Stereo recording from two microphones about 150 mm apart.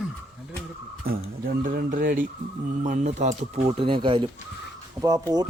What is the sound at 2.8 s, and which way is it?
Speech, 55° right (ahead or behind).